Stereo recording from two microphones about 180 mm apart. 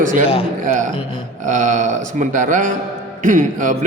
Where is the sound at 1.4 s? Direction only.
40° right (ahead or behind).